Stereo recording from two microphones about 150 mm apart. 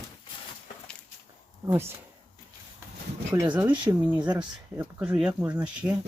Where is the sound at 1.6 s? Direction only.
15° right (ahead or behind).